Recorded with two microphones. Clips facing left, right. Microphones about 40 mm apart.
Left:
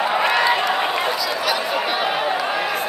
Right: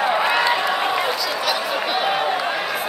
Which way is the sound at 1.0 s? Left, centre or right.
Centre.